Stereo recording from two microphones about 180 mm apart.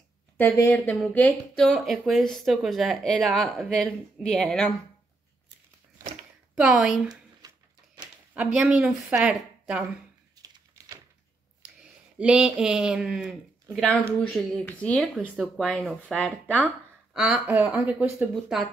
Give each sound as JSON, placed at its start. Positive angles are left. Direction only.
{"t": 0.6, "sound": "speech", "side_deg": 10}
{"t": 6.5, "sound": "speech", "side_deg": -5}
{"t": 7.4, "sound": "a sound", "side_deg": -20}
{"t": 8.0, "sound": "speech", "side_deg": -5}
{"t": 10.4, "sound": "typing", "side_deg": -20}
{"t": 11.8, "sound": "speech", "side_deg": -5}
{"t": 16.6, "sound": "speech", "side_deg": -5}